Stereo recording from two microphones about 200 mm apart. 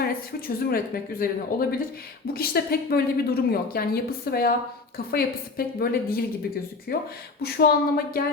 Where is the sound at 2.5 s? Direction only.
55° left (ahead or behind).